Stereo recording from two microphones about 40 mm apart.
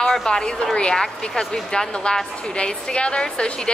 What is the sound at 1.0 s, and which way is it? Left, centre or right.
A woman's voice, centre.